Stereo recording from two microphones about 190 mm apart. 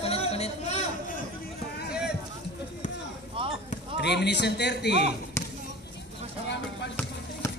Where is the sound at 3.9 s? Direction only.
65° left (ahead or behind).